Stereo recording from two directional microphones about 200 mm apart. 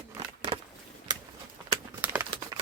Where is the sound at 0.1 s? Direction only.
20° right (ahead or behind).